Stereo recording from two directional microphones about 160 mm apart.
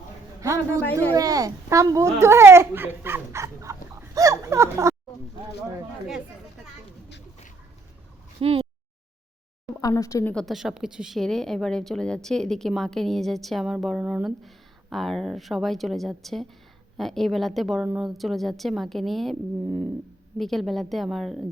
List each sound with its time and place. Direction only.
0.4 s speech: 20° right (ahead or behind)
8.4 s speech: 35° right (ahead or behind)
9.8 s a woman's voice: 20° left (ahead or behind)
10.3 s speech: centre (ahead or behind)
19.6 s cat: 15° right (ahead or behind)
20.4 s speech: centre (ahead or behind)